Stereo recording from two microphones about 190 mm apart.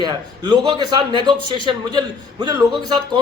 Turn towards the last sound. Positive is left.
turn(degrees=-20)  # may be behind; listen again after turning